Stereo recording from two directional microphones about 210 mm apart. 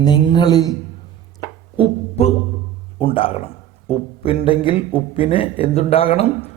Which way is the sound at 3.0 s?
25° left (ahead or behind).